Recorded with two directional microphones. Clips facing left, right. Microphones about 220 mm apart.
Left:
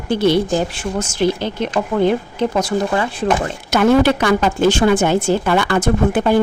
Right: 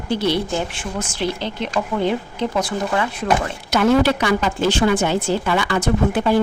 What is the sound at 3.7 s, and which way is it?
A woman's voice, 50° left (ahead or behind).